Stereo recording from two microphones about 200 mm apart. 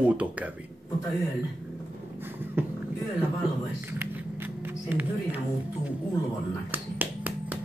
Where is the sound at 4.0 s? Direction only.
10° right (ahead or behind).